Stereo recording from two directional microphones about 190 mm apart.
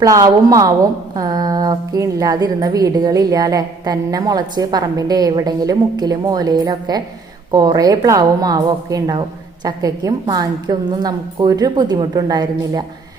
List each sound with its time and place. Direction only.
0.0 s a woman's voice: 20° right (ahead or behind)